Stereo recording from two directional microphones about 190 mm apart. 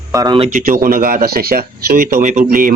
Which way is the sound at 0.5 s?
45° right (ahead or behind).